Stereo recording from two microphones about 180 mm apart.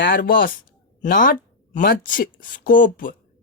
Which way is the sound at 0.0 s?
55° left (ahead or behind).